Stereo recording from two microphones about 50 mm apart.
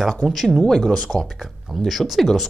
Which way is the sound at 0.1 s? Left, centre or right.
Centre.